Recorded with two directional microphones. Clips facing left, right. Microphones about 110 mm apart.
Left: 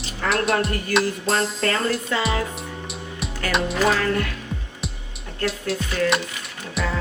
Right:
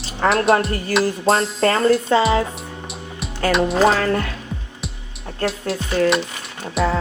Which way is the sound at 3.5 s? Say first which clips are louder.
Right 6 dB; centre (ahead or behind).